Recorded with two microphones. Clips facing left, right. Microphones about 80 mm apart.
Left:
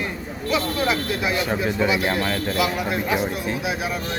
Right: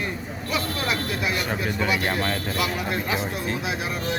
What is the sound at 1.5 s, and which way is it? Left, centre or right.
Speech, centre.